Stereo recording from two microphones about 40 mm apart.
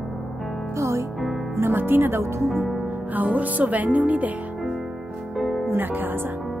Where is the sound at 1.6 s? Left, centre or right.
Right.